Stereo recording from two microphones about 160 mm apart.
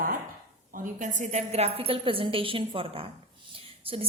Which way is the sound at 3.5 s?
35° right (ahead or behind).